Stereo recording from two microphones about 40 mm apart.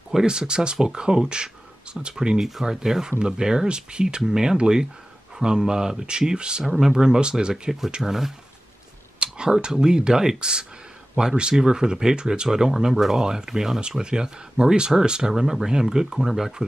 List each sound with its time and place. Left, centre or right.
0.1 s speech: centre
6.6 s speech: centre
8.0 s speech: centre
9.2 s speech: right; by 16.5 s centre